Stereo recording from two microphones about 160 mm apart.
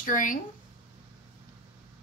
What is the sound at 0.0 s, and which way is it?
Speech, 55° left (ahead or behind).